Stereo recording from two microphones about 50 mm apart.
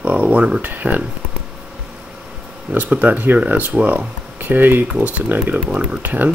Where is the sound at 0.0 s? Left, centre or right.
Right.